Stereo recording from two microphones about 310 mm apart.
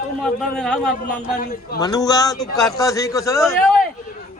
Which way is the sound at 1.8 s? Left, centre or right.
Centre.